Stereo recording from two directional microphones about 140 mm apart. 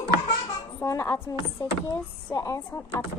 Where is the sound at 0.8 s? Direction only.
20° left (ahead or behind).